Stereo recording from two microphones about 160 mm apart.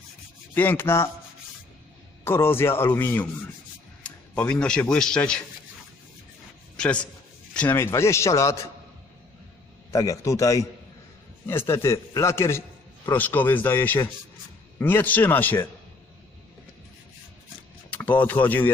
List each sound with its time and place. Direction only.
0.5 s a man's voice: 10° left (ahead or behind)
2.2 s a man's voice: 15° left (ahead or behind)
6.7 s a man's voice: 5° left (ahead or behind)
9.9 s a man's voice: 20° left (ahead or behind)
17.9 s speech: 10° left (ahead or behind)